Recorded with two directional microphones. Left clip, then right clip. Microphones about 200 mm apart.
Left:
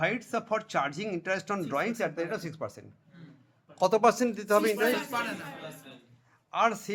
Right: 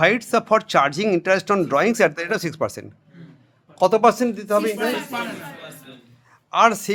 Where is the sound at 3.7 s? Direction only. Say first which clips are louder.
Right 8 dB; 10° right (ahead or behind).